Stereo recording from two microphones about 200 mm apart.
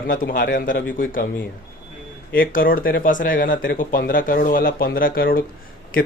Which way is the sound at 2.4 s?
45° left (ahead or behind).